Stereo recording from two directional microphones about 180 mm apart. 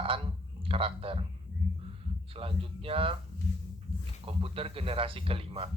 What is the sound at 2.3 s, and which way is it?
Speech, 30° right (ahead or behind).